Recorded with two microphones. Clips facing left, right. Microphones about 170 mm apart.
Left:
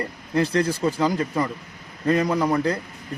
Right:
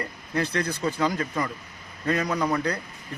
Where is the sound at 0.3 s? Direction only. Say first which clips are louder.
Left 6 dB; 30° left (ahead or behind).